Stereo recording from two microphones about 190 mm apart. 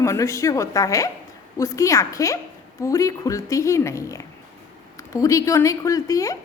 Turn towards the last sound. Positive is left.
turn(degrees=15)  # may be behind; listen again after turning